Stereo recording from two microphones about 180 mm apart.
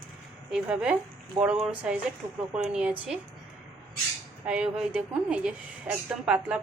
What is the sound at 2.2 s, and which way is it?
Speech, 20° right (ahead or behind).